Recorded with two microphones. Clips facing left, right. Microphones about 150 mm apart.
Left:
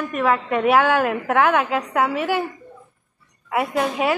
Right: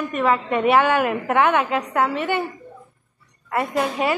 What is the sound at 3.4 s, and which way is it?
Speech, 5° left (ahead or behind).